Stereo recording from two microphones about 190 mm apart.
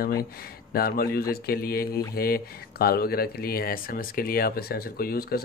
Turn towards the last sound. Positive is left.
turn(degrees=50)  # may be behind; listen again after turning